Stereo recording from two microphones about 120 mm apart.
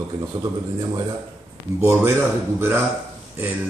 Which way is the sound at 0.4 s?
35° right (ahead or behind).